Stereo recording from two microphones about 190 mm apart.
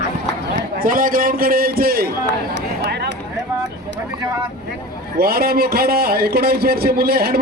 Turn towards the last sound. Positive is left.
turn(degrees=-55)  # may be behind; listen again after turning